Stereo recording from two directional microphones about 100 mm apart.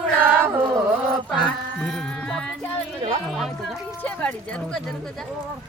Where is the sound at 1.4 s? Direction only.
10° left (ahead or behind).